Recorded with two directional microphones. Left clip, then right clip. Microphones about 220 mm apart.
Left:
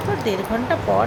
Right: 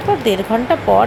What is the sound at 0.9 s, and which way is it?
Speech, 20° right (ahead or behind).